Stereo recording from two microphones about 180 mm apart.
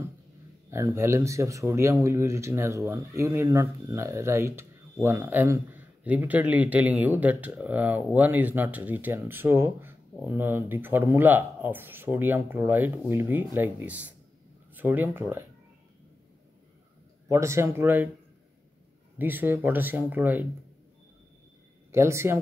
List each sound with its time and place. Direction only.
0.7 s a man's voice: 15° right (ahead or behind)
17.3 s a man's voice: 15° right (ahead or behind)
19.1 s a man's voice: 10° right (ahead or behind)
21.9 s a man's voice: 15° right (ahead or behind)